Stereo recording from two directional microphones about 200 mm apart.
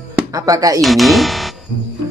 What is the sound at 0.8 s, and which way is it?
Speech, centre (ahead or behind).